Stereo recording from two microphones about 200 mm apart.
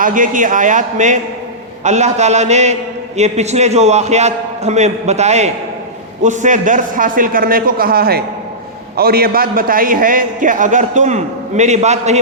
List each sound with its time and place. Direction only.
0.0 s a man's voice: 40° right (ahead or behind)